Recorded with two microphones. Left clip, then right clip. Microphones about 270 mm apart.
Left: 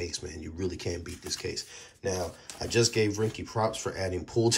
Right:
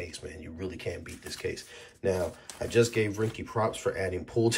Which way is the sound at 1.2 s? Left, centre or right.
Centre.